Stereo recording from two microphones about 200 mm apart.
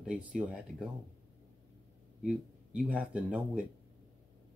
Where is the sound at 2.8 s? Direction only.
5° right (ahead or behind).